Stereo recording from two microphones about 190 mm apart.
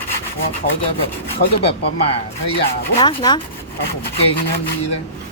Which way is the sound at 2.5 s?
25° left (ahead or behind).